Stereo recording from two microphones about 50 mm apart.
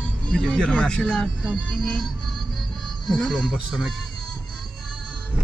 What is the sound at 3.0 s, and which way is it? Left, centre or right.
Speech, centre.